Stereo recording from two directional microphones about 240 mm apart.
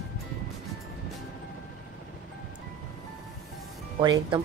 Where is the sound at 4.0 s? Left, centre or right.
Centre.